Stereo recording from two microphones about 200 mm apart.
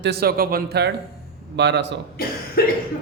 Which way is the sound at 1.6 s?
60° right (ahead or behind).